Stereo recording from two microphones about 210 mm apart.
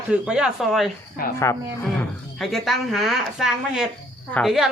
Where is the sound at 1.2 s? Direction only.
45° left (ahead or behind).